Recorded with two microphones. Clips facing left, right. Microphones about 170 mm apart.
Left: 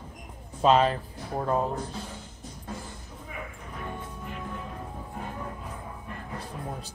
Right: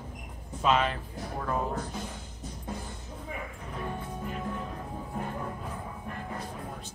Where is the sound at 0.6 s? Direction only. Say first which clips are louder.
Left 5 dB; 35° left (ahead or behind).